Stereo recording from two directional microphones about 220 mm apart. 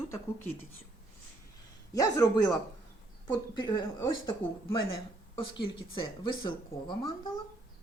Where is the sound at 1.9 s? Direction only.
15° left (ahead or behind).